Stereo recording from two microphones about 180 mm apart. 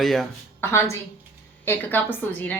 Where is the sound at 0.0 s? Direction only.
Centre (ahead or behind).